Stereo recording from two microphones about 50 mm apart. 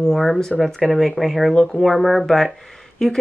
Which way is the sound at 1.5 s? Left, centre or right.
Centre.